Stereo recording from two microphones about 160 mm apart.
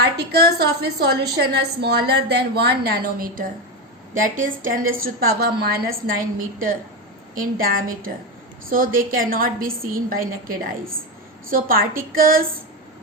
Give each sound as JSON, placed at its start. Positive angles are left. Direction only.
{"t": 0.0, "sound": "a woman's voice", "side_deg": -85}
{"t": 7.3, "sound": "a woman's voice", "side_deg": -65}